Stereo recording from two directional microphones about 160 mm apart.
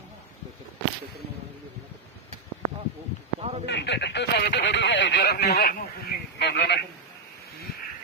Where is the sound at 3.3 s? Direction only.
40° right (ahead or behind).